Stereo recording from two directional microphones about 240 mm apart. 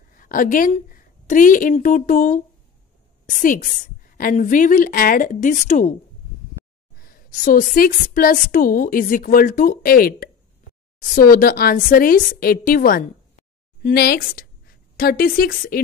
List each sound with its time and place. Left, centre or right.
0.2 s a woman's voice: left
7.0 s speech: left